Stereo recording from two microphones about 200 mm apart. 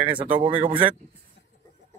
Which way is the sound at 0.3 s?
25° right (ahead or behind).